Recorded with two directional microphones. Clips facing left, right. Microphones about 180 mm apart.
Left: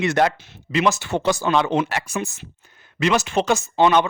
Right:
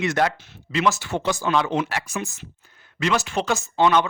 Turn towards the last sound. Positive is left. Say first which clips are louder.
# left 2 dB
turn(degrees=20)  # may be behind; listen again after turning